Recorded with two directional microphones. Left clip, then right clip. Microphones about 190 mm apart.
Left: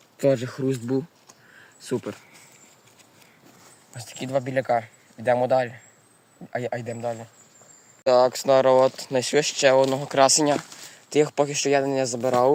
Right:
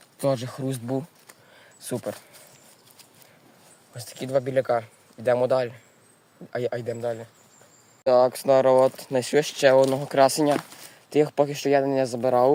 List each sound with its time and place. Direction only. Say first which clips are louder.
0.2 s speech: left 4 dB; 20° right (ahead or behind)
3.9 s speech: right 1 dB; 10° right (ahead or behind)